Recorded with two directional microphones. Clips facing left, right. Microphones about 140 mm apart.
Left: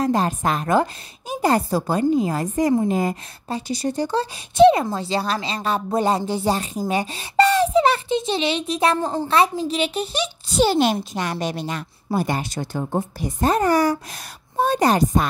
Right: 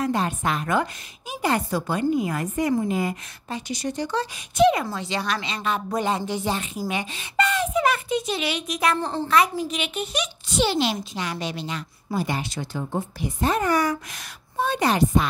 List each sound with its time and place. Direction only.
0.0 s speech: 40° left (ahead or behind)
8.9 s a woman's voice: 15° left (ahead or behind)
9.3 s speech: 30° left (ahead or behind)